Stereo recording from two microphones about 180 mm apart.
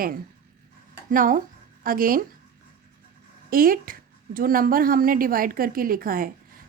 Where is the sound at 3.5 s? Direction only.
55° right (ahead or behind).